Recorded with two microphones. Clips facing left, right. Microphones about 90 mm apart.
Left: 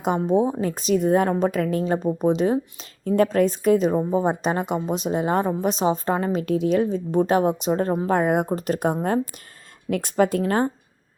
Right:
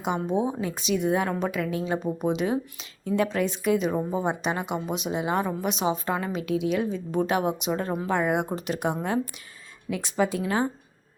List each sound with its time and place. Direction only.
0.0 s a woman's voice: 40° left (ahead or behind)
9.9 s speech: 50° left (ahead or behind)